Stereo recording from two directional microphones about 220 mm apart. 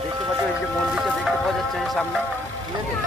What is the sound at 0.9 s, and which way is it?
Music, centre (ahead or behind).